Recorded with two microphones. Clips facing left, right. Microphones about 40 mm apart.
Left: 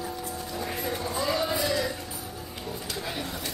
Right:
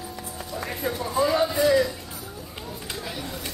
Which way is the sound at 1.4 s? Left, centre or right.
Right.